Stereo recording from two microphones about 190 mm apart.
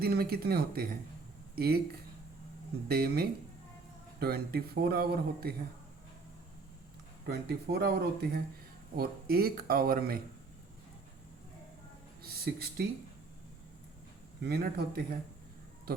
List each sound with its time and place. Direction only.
0.0 s speech: 55° right (ahead or behind)
2.9 s speech: 55° right (ahead or behind)
7.3 s speech: 55° right (ahead or behind)
12.2 s speech: 55° right (ahead or behind)
14.4 s speech: 55° right (ahead or behind)